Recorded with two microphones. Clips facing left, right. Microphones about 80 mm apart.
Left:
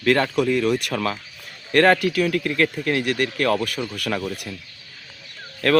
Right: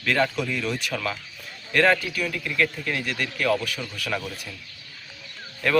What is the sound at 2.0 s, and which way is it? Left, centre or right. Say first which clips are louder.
A man's voice: left 8 dB; left.